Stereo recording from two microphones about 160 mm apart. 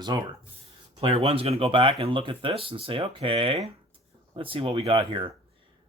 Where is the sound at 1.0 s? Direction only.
35° right (ahead or behind).